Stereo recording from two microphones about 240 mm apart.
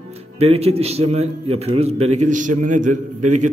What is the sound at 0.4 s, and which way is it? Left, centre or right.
A man's voice, right.